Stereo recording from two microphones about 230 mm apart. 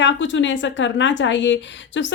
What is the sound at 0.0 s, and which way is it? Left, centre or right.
Speech, left.